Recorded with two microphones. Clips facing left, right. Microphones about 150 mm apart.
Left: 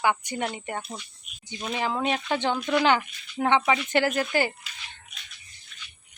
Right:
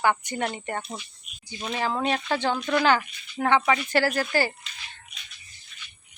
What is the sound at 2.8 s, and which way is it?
Speech, 20° left (ahead or behind).